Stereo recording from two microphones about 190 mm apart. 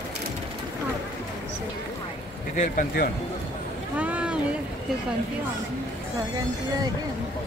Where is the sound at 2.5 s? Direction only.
50° left (ahead or behind).